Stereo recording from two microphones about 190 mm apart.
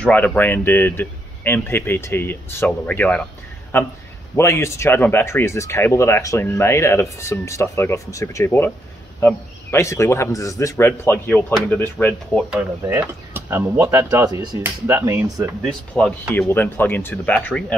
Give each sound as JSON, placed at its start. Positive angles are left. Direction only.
{"t": 0.0, "sound": "speech", "side_deg": 10}
{"t": 12.8, "sound": "speech", "side_deg": -15}
{"t": 15.6, "sound": "speech", "side_deg": 0}